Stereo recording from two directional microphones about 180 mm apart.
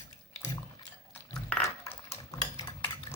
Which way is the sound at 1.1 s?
10° left (ahead or behind).